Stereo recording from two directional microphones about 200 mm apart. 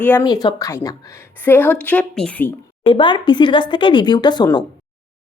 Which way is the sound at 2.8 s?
25° left (ahead or behind).